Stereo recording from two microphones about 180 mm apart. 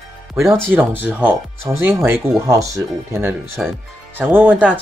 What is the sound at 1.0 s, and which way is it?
Speech, 10° right (ahead or behind).